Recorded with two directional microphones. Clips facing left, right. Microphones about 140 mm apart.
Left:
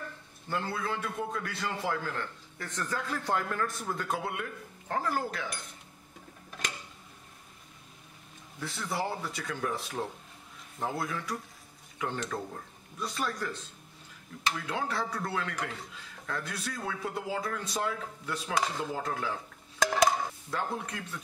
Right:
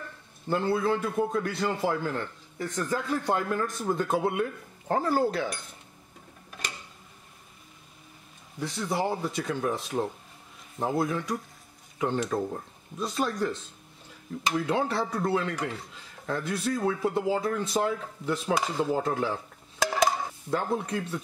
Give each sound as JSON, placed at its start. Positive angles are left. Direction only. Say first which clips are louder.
{"t": 0.5, "sound": "a man's voice", "louder": "right 8 dB", "side_deg": -25}
{"t": 8.5, "sound": "a man's voice", "louder": "right 5 dB", "side_deg": -20}
{"t": 14.5, "sound": "a man's voice", "louder": "right 7 dB", "side_deg": -25}
{"t": 18.5, "sound": "speech", "louder": "right 3 dB", "side_deg": 0}
{"t": 19.0, "sound": "a man's voice", "louder": "right 6 dB", "side_deg": -30}
{"t": 19.8, "sound": "a sound", "louder": "right 1 dB", "side_deg": 0}
{"t": 20.4, "sound": "a man's voice", "louder": "right 6 dB", "side_deg": -30}